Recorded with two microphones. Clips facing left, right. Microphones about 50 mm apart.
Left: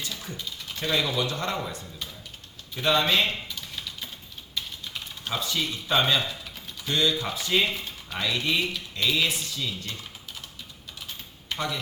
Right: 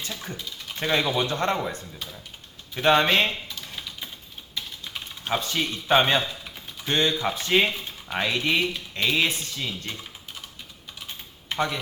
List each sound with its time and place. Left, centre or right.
0.0 s speech: right
4.5 s typing: centre
5.4 s speech: right
11.4 s a sound: right